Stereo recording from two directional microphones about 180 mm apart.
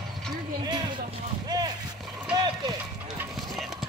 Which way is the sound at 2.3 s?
20° right (ahead or behind).